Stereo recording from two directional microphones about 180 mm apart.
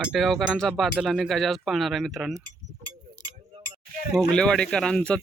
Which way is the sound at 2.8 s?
25° right (ahead or behind).